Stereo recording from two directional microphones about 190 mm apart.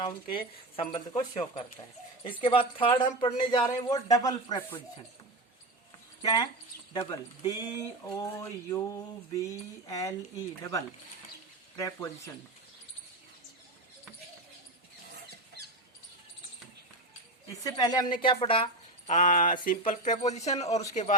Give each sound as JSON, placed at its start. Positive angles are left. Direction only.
{"t": 0.0, "sound": "speech", "side_deg": 30}
{"t": 6.2, "sound": "speech", "side_deg": 25}
{"t": 17.7, "sound": "speech", "side_deg": 20}
{"t": 19.1, "sound": "speech", "side_deg": 45}